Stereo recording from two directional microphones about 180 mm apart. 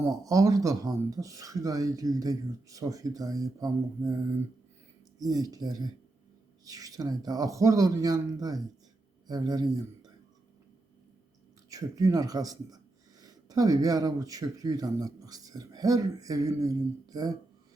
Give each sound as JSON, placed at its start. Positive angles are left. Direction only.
{"t": 0.0, "sound": "speech", "side_deg": -20}
{"t": 5.2, "sound": "speech", "side_deg": -20}
{"t": 11.7, "sound": "speech", "side_deg": -20}